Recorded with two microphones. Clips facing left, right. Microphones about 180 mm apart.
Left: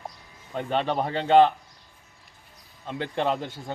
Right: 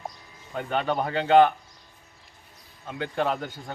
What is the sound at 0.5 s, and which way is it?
Speech, 25° left (ahead or behind).